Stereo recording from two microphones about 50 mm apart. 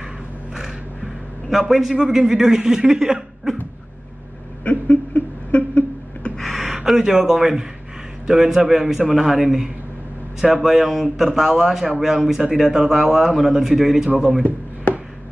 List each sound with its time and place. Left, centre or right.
0.6 s a man's voice: centre
4.6 s a sound: left
6.3 s gasp: centre
8.3 s speech: centre